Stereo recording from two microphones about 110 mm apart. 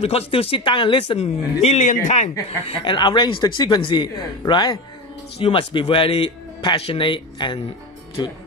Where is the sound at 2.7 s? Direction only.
50° left (ahead or behind).